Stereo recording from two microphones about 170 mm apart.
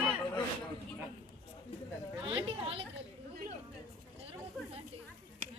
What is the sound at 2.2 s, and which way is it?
Speech, 35° right (ahead or behind).